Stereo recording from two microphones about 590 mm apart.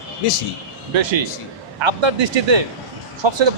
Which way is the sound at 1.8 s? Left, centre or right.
Right.